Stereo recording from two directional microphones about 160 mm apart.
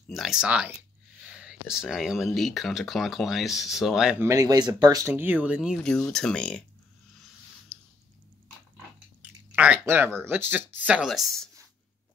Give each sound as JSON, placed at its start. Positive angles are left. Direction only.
{"t": 0.1, "sound": "speech", "side_deg": 0}
{"t": 4.2, "sound": "speech", "side_deg": -20}
{"t": 5.9, "sound": "speech", "side_deg": 5}
{"t": 7.7, "sound": "a sound", "side_deg": 5}
{"t": 9.6, "sound": "speech", "side_deg": -10}